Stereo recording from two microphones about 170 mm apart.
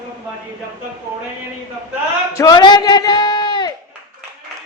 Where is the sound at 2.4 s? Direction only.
20° left (ahead or behind).